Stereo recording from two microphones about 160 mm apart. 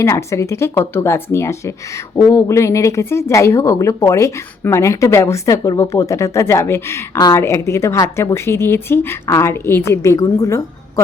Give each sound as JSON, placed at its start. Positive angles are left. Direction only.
{"t": 0.0, "sound": "speech", "side_deg": 20}